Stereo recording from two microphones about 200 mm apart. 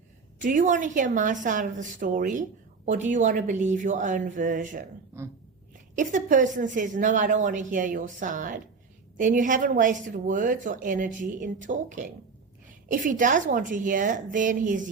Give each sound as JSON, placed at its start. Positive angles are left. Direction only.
{"t": 0.3, "sound": "a woman's voice", "side_deg": -40}
{"t": 5.1, "sound": "a sound", "side_deg": -15}
{"t": 6.0, "sound": "a woman's voice", "side_deg": -40}